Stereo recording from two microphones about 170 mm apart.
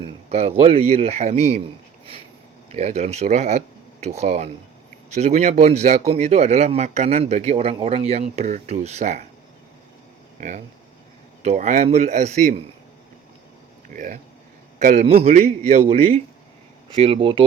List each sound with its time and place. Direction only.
0.0 s speech: 35° right (ahead or behind)
2.7 s speech: 40° right (ahead or behind)
11.4 s speech: 45° right (ahead or behind)
13.9 s a man's voice: 50° right (ahead or behind)
15.0 s speech: 40° right (ahead or behind)